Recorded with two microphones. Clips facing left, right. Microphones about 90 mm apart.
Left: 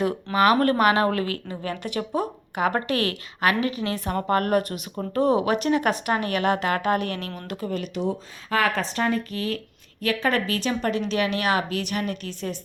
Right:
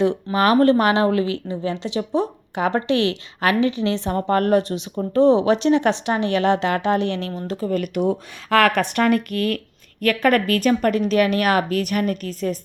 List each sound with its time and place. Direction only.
0.3 s speech: 35° right (ahead or behind)
1.1 s a woman's voice: 45° left (ahead or behind)
1.5 s speech: 25° right (ahead or behind)
2.9 s a woman's voice: 45° left (ahead or behind)
3.4 s speech: 30° right (ahead or behind)
7.7 s a woman's voice: 55° right (ahead or behind)